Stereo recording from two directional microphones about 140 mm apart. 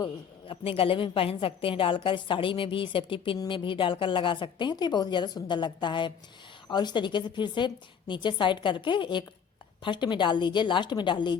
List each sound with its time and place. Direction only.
0.0 s a woman's voice: 35° left (ahead or behind)